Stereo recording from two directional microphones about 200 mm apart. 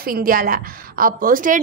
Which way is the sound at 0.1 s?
45° right (ahead or behind).